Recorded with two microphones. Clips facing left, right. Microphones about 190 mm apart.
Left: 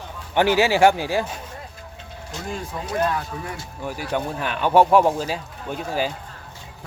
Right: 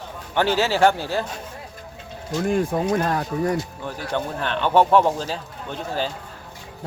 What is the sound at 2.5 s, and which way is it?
Speech, 50° right (ahead or behind).